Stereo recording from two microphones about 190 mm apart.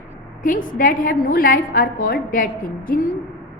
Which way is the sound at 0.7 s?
45° left (ahead or behind).